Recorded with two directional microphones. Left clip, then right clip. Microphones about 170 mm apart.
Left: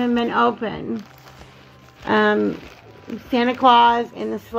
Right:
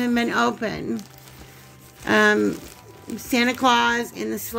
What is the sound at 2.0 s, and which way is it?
A woman's voice, 30° right (ahead or behind).